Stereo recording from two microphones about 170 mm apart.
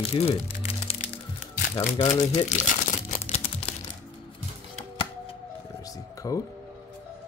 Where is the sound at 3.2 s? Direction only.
40° left (ahead or behind).